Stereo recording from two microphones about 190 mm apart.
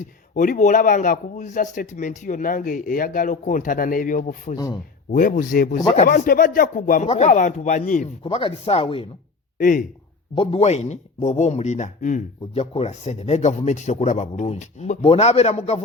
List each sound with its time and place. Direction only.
0.3 s a man's voice: 45° left (ahead or behind)
4.5 s speech: 20° left (ahead or behind)
5.1 s a man's voice: 45° left (ahead or behind)
8.2 s speech: 30° left (ahead or behind)
9.6 s a man's voice: 45° left (ahead or behind)
10.3 s a man's voice: 30° left (ahead or behind)